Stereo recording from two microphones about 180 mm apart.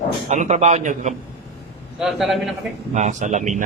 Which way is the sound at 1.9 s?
Centre (ahead or behind).